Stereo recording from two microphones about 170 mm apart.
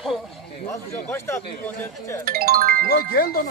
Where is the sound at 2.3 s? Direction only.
60° right (ahead or behind).